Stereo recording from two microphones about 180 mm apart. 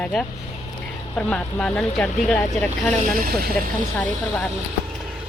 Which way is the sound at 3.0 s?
55° right (ahead or behind).